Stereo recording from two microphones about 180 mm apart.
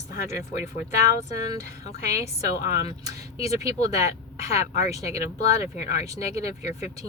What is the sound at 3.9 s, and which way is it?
Speech, 40° left (ahead or behind).